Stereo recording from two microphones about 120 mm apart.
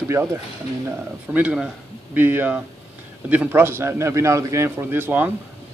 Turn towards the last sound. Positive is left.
turn(degrees=-15)  # may be behind; listen again after turning